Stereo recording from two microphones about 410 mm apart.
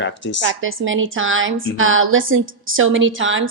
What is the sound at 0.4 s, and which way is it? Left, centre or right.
A woman's voice, right.